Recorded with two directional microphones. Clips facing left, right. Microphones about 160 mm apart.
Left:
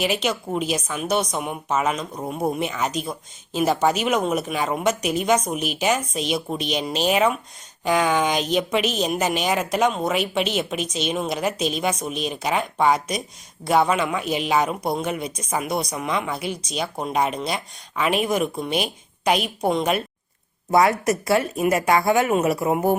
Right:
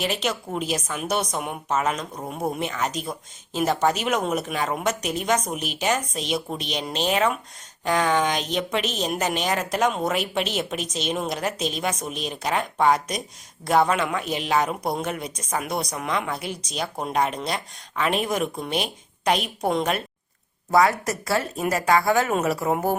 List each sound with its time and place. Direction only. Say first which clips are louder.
0.0 s a woman's voice: left 3 dB; centre (ahead or behind)
20.7 s speech: left 2 dB; 20° left (ahead or behind)